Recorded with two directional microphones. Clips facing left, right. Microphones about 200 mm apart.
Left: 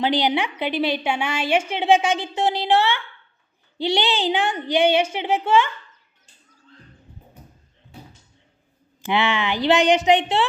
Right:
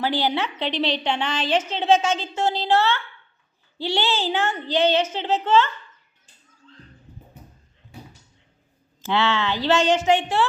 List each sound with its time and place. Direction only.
0.0 s a woman's voice: 15° left (ahead or behind)
9.0 s a woman's voice: 15° left (ahead or behind)